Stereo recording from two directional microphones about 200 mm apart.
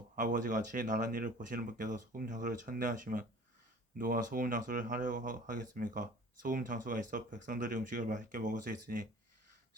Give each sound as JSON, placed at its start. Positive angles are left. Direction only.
{"t": 0.2, "sound": "speech", "side_deg": -40}